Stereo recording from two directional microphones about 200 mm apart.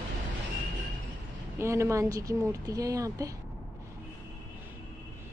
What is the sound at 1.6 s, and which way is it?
A woman's voice, 15° right (ahead or behind).